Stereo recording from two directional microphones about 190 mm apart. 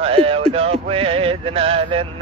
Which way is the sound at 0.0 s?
30° right (ahead or behind).